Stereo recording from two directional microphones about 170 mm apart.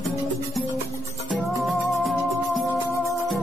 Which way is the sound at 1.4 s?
Centre (ahead or behind).